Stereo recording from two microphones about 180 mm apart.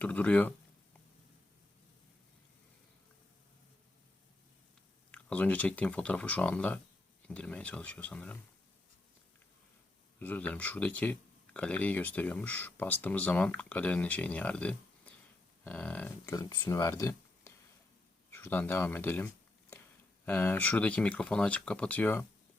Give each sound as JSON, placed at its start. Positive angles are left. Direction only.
{"t": 0.0, "sound": "speech", "side_deg": 5}
{"t": 5.1, "sound": "speech", "side_deg": 10}
{"t": 10.2, "sound": "speech", "side_deg": 10}